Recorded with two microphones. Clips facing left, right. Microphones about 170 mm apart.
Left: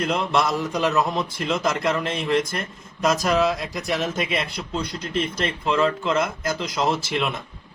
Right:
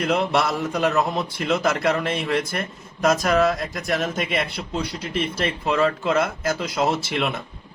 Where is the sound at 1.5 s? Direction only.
60° right (ahead or behind).